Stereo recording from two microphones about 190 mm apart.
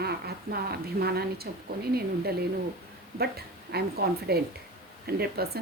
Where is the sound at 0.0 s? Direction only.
55° right (ahead or behind).